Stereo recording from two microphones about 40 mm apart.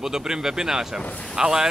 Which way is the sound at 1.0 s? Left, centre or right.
Left.